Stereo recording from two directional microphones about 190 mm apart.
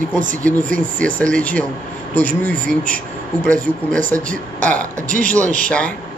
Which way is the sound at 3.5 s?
45° right (ahead or behind).